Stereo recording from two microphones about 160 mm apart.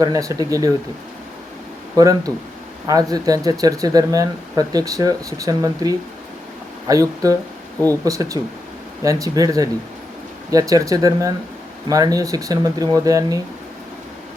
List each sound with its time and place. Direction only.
0.0 s speech: 20° right (ahead or behind)
2.0 s speech: 25° right (ahead or behind)